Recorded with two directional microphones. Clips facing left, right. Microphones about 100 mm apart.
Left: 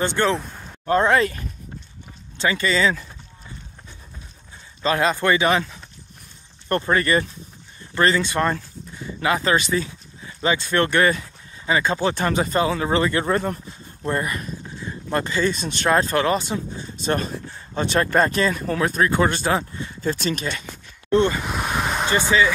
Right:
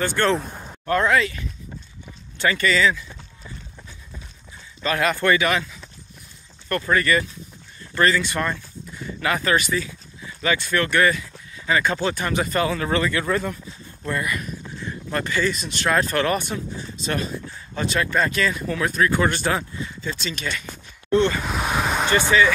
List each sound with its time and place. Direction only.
0.2 s speech: centre (ahead or behind)
0.8 s speech: 30° left (ahead or behind)
1.2 s speech: 45° left (ahead or behind)
2.3 s speech: 20° left (ahead or behind)
4.8 s speech: 25° left (ahead or behind)
17.0 s a sound: 40° left (ahead or behind)
17.7 s speech: 35° left (ahead or behind)
20.0 s speech: 45° left (ahead or behind)
21.1 s speech: 20° left (ahead or behind)
21.5 s vehicle: 5° right (ahead or behind)
22.3 s speech: 20° left (ahead or behind)